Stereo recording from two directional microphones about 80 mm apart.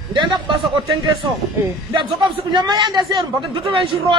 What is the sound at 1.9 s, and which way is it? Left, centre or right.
A man's voice, right.